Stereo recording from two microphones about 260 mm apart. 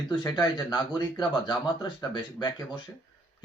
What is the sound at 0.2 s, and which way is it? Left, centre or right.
Speech, centre.